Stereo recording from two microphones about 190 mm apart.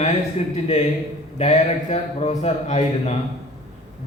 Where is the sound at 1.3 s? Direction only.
35° left (ahead or behind).